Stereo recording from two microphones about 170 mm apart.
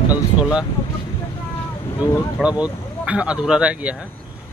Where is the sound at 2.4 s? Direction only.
5° right (ahead or behind).